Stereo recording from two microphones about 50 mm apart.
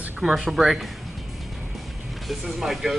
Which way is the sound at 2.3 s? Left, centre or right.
Centre.